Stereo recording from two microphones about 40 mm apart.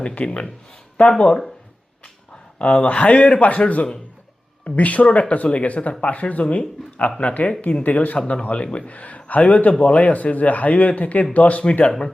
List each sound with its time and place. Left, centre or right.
0.0 s speech: left
2.6 s speech: left
11.9 s speech: centre